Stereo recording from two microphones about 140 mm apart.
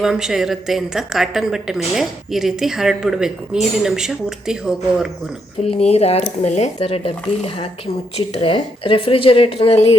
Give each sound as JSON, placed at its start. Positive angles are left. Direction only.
{"t": 0.0, "sound": "a woman's voice", "side_deg": -5}
{"t": 5.6, "sound": "speech", "side_deg": 45}